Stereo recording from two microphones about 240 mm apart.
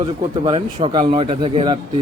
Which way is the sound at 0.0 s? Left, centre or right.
Centre.